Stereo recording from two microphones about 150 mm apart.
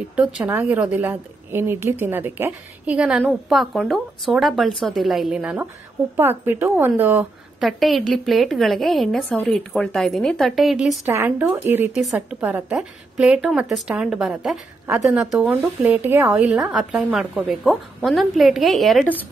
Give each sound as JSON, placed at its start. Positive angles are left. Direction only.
{"t": 0.1, "sound": "a woman's voice", "side_deg": -10}
{"t": 7.6, "sound": "a woman's voice", "side_deg": 0}
{"t": 11.1, "sound": "a woman's voice", "side_deg": -15}
{"t": 11.9, "sound": "a woman's voice", "side_deg": 0}